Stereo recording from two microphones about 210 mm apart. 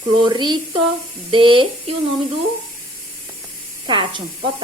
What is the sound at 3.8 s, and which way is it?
Speech, 20° right (ahead or behind).